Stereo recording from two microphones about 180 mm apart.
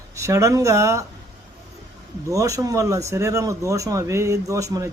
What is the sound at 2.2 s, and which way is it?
Speech, 20° right (ahead or behind).